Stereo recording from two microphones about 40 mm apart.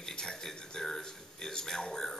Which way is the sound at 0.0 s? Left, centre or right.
Centre.